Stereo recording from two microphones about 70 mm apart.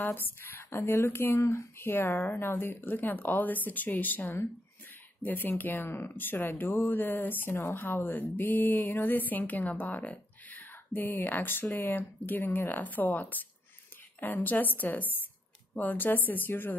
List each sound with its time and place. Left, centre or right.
0.0 s speech: left
5.2 s speech: left